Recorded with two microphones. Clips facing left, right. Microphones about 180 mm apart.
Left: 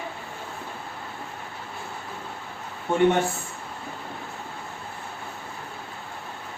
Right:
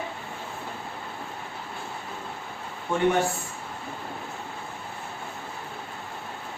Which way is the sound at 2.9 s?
25° left (ahead or behind).